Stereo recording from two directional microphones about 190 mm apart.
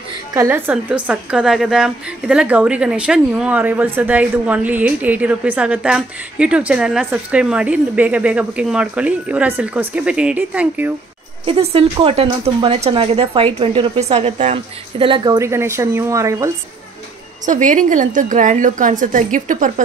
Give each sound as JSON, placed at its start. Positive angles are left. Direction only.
{"t": 0.3, "sound": "a woman's voice", "side_deg": -15}
{"t": 11.4, "sound": "a woman's voice", "side_deg": -30}
{"t": 17.5, "sound": "a woman's voice", "side_deg": -40}